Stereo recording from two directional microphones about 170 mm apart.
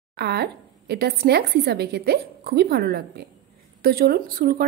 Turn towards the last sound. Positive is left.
turn(degrees=-60)  # may be behind; listen again after turning